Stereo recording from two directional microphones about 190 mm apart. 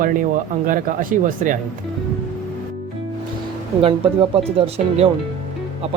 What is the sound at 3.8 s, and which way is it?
Speech, 30° right (ahead or behind).